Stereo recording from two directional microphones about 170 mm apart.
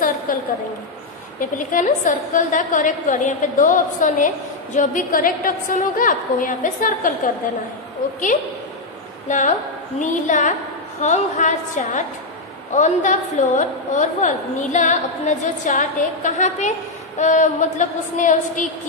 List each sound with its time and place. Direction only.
0.3 s a woman's voice: 55° left (ahead or behind)
1.7 s a woman's voice: 50° left (ahead or behind)
9.3 s a woman's voice: 45° left (ahead or behind)